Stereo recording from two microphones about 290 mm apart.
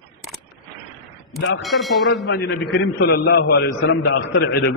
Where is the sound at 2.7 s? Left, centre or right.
Left.